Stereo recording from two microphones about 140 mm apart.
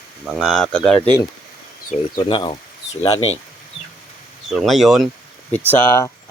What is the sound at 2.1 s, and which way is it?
Speech, 35° left (ahead or behind).